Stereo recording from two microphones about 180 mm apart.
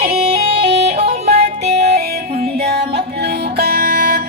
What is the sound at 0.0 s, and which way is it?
Music, 35° right (ahead or behind).